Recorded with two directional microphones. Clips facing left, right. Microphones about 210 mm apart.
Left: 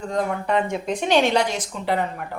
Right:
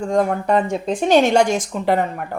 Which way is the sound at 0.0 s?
50° right (ahead or behind).